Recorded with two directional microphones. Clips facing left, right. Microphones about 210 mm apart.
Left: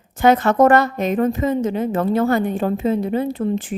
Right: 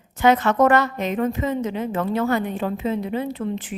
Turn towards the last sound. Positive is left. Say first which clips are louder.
# left 5 dB
turn(degrees=45)  # may be behind; listen again after turning